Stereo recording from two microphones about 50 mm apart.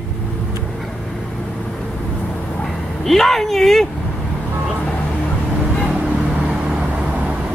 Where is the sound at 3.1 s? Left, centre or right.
Centre.